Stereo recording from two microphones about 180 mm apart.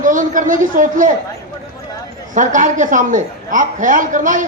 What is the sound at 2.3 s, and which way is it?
A man's voice, 45° right (ahead or behind).